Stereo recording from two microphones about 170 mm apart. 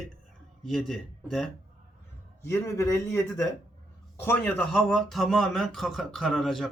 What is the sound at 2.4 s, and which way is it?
A man's voice, 15° left (ahead or behind).